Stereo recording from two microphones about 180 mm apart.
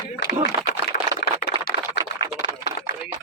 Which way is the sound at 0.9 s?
55° left (ahead or behind).